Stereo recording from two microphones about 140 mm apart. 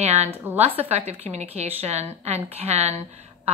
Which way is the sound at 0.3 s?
15° right (ahead or behind).